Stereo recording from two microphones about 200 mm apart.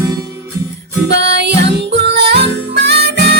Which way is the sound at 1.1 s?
60° right (ahead or behind).